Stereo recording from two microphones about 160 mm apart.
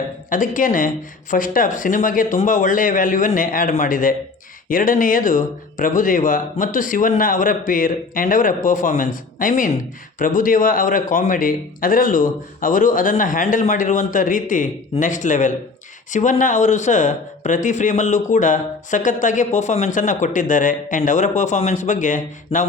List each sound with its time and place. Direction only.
0.3 s a man's voice: 55° left (ahead or behind)